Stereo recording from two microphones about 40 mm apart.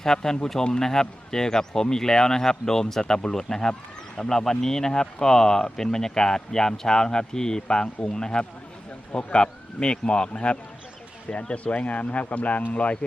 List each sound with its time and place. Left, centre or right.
0.0 s a man's voice: centre; by 13.0 s left